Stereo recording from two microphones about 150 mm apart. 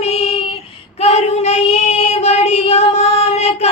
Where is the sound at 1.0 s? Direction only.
45° left (ahead or behind).